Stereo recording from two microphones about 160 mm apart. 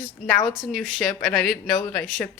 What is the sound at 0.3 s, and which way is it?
Speech, 5° left (ahead or behind).